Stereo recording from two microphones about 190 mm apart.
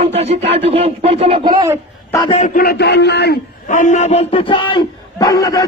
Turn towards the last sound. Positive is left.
turn(degrees=20)  # may be behind; listen again after turning